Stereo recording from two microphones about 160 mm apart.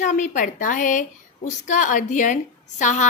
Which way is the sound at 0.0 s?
50° left (ahead or behind).